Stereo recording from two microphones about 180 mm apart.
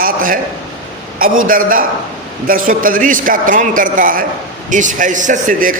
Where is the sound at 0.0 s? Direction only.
50° right (ahead or behind).